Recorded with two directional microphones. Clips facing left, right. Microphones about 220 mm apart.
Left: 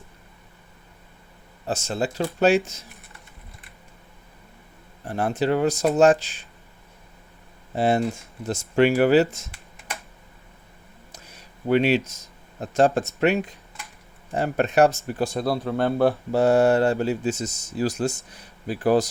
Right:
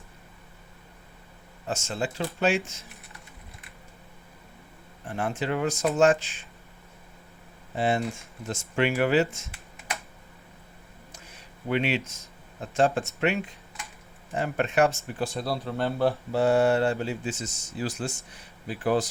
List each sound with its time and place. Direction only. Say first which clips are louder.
1.6 s speech: left 4 dB; 35° left (ahead or behind)
5.0 s speech: left 6 dB; 35° left (ahead or behind)
7.8 s speech: left 5 dB; 40° left (ahead or behind)
11.1 s a sound: left 3 dB; 40° left (ahead or behind)
12.5 s speech: left 4 dB; 40° left (ahead or behind)